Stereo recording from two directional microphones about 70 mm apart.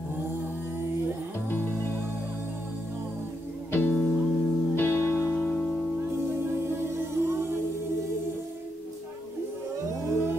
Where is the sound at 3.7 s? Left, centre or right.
Left.